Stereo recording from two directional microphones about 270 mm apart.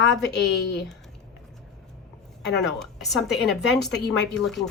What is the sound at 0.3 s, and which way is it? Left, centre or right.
Speech, left.